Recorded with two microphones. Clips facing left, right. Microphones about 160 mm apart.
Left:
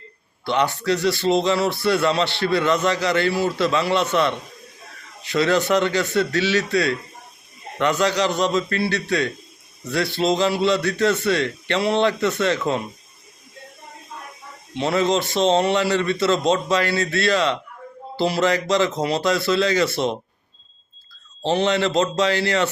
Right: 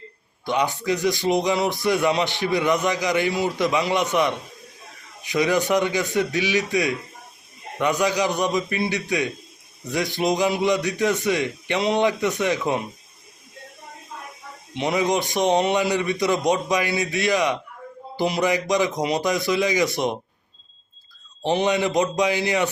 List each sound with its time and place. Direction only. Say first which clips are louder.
0.4 s speech: left 2 dB; 15° right (ahead or behind)
14.8 s speech: left 2 dB; 15° right (ahead or behind)
21.4 s speech: left 1 dB; 15° right (ahead or behind)